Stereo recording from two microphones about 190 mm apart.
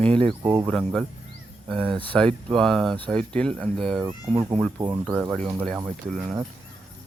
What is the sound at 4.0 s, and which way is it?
Speech, 20° right (ahead or behind).